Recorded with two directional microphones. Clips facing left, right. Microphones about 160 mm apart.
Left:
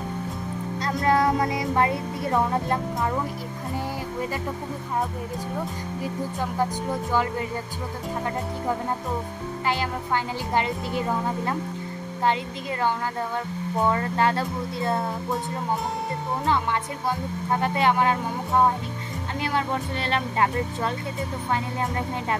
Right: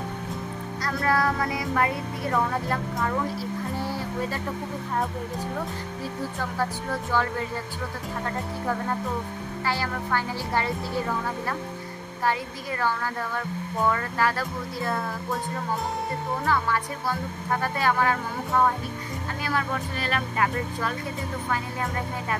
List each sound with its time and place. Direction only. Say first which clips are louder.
0.8 s speech: left 3 dB; 20° left (ahead or behind)
6.6 s speech: left 3 dB; 15° left (ahead or behind)
9.7 s speech: left 2 dB; 20° left (ahead or behind)
13.8 s speech: left 2 dB; 25° left (ahead or behind)
16.4 s speech: left 1 dB; 20° left (ahead or behind)